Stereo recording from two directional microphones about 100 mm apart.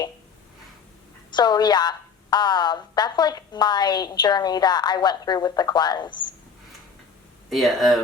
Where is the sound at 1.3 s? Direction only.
45° left (ahead or behind).